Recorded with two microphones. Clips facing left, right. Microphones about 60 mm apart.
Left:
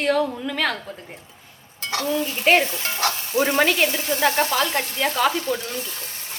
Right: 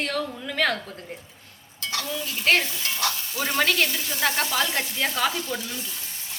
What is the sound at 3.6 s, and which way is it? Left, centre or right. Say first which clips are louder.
Speech: left 3 dB; centre.